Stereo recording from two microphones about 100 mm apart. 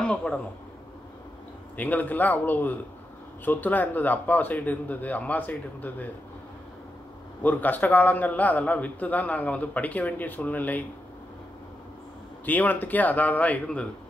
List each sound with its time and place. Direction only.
0.0 s a man's voice: 10° left (ahead or behind)
1.8 s a man's voice: 15° left (ahead or behind)
7.4 s a man's voice: 15° left (ahead or behind)
12.4 s a man's voice: 15° left (ahead or behind)